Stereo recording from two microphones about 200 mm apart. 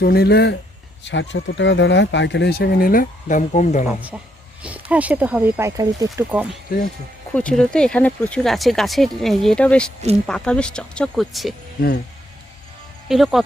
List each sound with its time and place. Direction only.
0.0 s speech: 50° left (ahead or behind)
4.1 s speech: 5° right (ahead or behind)
7.3 s speech: 5° left (ahead or behind)
13.1 s speech: centre (ahead or behind)